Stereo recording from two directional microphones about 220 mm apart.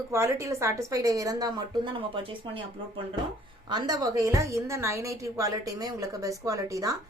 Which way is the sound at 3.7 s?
20° right (ahead or behind).